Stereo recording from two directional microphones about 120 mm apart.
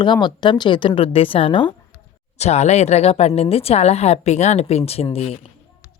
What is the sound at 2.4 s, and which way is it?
Speech, 70° left (ahead or behind).